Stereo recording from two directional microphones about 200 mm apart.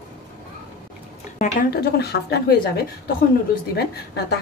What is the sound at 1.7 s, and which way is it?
A woman's voice, 55° left (ahead or behind).